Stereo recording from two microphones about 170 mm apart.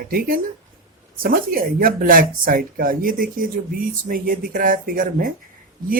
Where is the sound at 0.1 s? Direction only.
55° right (ahead or behind).